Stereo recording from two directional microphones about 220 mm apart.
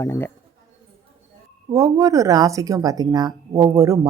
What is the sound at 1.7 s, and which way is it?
Speech, 15° right (ahead or behind).